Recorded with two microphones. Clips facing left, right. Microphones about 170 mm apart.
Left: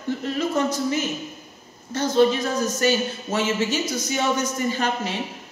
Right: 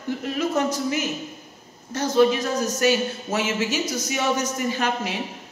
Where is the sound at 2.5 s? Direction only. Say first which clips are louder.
Even; 10° right (ahead or behind).